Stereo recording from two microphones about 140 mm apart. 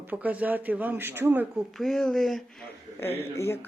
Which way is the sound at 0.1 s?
10° right (ahead or behind).